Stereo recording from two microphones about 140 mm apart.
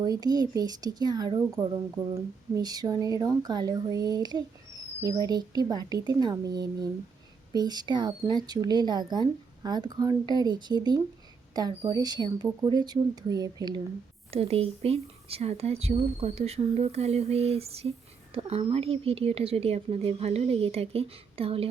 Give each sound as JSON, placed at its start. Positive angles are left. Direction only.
{"t": 0.0, "sound": "speech", "side_deg": -30}
{"t": 14.3, "sound": "speech", "side_deg": -45}